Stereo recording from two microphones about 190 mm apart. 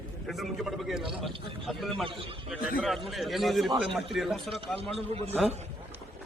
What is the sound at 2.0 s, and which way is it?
Speech, 25° right (ahead or behind).